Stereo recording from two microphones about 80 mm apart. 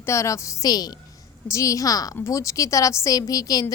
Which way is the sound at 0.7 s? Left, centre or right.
Left.